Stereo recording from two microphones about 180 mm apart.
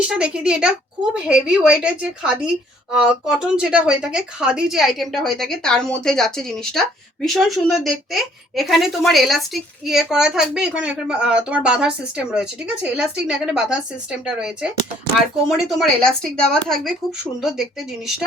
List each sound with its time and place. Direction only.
0.0 s a woman's voice: 5° right (ahead or behind)